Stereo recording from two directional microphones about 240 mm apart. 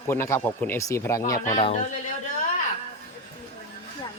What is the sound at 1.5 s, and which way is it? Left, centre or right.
Speech, left.